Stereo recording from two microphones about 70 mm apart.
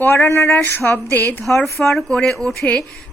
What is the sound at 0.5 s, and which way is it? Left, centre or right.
Speech, left.